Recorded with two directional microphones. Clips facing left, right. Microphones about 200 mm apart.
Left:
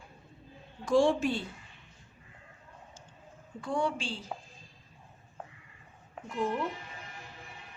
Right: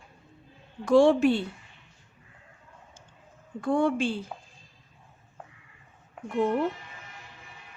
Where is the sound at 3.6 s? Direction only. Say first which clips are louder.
Right 7 dB; 55° right (ahead or behind).